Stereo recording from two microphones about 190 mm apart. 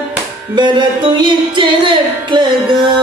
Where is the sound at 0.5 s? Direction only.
25° right (ahead or behind).